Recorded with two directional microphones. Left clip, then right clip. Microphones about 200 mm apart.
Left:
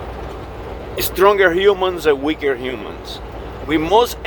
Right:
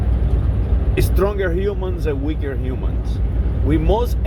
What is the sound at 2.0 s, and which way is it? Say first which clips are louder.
Speech: left 7 dB; 25° left (ahead or behind).